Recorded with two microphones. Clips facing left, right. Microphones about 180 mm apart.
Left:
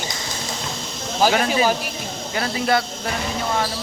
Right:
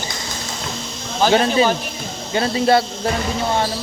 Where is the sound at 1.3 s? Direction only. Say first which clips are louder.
Right 4 dB; 30° right (ahead or behind).